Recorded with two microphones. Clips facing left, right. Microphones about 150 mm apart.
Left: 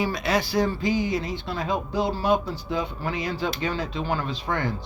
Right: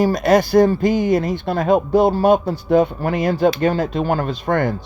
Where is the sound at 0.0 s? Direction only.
45° right (ahead or behind).